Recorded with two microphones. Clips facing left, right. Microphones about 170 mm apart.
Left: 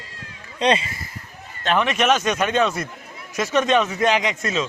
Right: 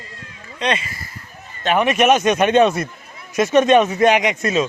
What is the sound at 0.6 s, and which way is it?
Speech, 30° left (ahead or behind).